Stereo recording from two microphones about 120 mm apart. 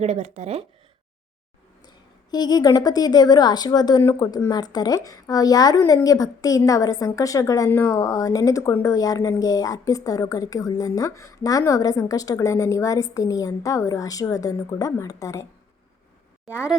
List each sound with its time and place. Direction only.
0.0 s speech: 65° right (ahead or behind)
2.3 s speech: 35° left (ahead or behind)